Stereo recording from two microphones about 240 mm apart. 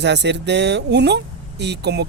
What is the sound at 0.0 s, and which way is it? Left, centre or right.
Speech, right.